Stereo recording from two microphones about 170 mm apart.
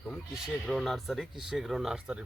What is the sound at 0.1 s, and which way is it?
Speech, centre (ahead or behind).